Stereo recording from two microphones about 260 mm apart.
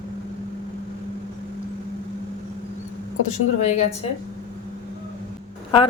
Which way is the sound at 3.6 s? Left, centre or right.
Left.